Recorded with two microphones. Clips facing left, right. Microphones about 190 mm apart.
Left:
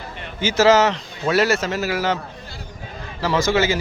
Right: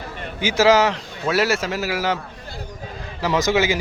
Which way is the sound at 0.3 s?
15° right (ahead or behind).